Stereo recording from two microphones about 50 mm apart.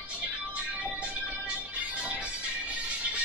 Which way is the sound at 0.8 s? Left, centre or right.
Right.